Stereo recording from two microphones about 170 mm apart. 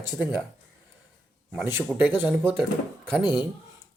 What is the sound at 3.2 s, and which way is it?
Speech, 25° left (ahead or behind).